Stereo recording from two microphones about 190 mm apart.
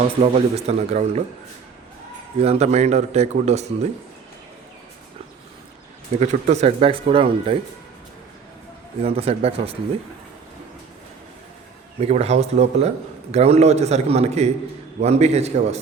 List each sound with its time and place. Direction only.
0.2 s speech: 35° right (ahead or behind)
2.4 s speech: 35° right (ahead or behind)
6.1 s speech: 35° right (ahead or behind)
9.0 s speech: 30° right (ahead or behind)
11.9 s speech: 35° right (ahead or behind)